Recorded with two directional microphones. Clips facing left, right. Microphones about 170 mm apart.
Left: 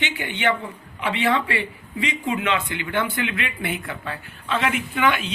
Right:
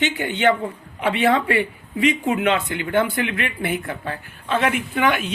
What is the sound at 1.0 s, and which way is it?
Speech, 55° right (ahead or behind).